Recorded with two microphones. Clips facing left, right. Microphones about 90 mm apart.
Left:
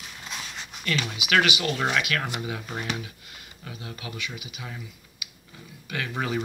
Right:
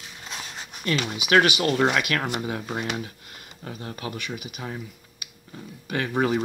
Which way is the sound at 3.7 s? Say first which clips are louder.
Right 5 dB; 45° right (ahead or behind).